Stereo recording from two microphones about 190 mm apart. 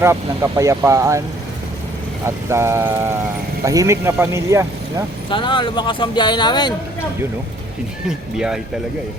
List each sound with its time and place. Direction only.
0.0 s speech: 15° right (ahead or behind)
2.2 s speech: 15° right (ahead or behind)
5.3 s speech: 25° left (ahead or behind)
8.4 s speech: 5° right (ahead or behind)